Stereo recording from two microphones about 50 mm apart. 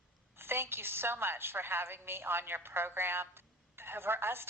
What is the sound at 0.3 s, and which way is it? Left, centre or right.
A woman's voice, right.